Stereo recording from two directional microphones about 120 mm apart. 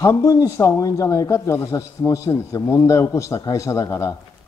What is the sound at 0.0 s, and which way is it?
A man's voice, 25° left (ahead or behind).